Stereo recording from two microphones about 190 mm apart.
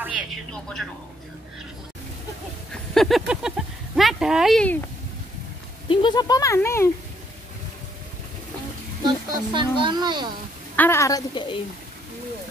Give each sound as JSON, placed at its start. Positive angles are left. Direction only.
{"t": 0.5, "sound": "a woman's voice", "side_deg": 5}
{"t": 2.7, "sound": "speech", "side_deg": 0}
{"t": 5.9, "sound": "speech", "side_deg": 25}
{"t": 9.0, "sound": "speech", "side_deg": -25}
{"t": 10.8, "sound": "a woman's voice", "side_deg": 15}